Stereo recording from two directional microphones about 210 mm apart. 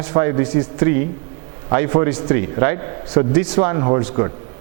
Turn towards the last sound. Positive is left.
turn(degrees=-20)  # may be behind; listen again after turning